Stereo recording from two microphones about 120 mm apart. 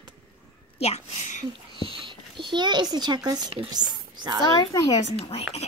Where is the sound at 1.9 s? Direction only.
45° right (ahead or behind).